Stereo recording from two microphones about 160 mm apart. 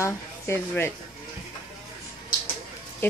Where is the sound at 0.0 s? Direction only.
15° left (ahead or behind).